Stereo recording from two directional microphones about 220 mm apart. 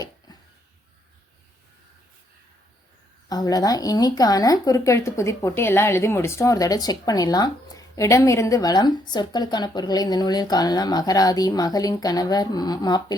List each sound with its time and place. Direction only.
3.2 s speech: 15° left (ahead or behind)